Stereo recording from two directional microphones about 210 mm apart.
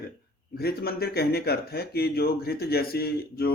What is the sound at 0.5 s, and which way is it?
Speech, 50° left (ahead or behind).